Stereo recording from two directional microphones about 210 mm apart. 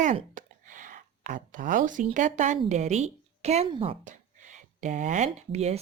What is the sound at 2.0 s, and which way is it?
Speech, 35° right (ahead or behind).